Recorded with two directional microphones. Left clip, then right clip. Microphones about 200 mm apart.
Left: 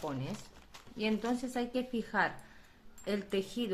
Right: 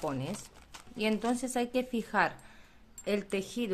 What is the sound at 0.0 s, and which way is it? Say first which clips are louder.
Speech: right 4 dB; 40° right (ahead or behind).